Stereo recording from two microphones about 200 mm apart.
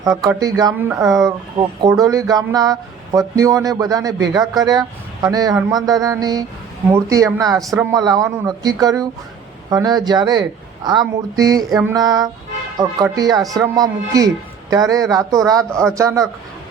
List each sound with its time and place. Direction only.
0.0 s speech: 15° right (ahead or behind)